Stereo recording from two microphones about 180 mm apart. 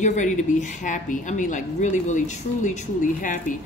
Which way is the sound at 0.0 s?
40° left (ahead or behind).